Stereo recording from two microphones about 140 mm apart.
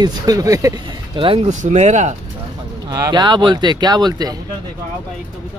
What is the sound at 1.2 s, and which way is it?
Speech, 40° right (ahead or behind).